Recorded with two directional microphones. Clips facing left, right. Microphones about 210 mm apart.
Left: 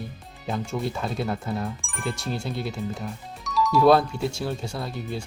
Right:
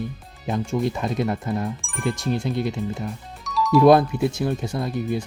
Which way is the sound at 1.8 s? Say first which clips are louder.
Right 5 dB; centre (ahead or behind).